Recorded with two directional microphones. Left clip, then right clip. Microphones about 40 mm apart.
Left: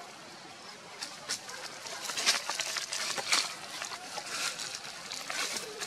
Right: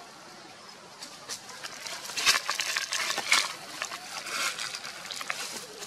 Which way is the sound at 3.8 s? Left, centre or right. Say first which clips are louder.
Right 3 dB; right.